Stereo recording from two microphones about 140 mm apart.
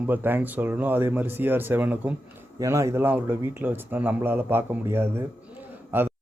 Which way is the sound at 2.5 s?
20° right (ahead or behind).